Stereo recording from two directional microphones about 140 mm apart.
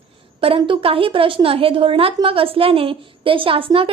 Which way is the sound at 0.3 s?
40° right (ahead or behind).